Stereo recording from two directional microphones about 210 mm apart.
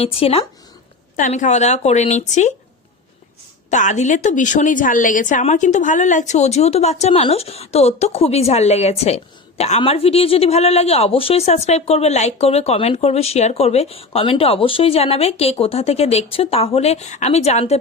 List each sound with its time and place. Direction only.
0.0 s a woman's voice: 25° left (ahead or behind)
3.7 s a woman's voice: 35° left (ahead or behind)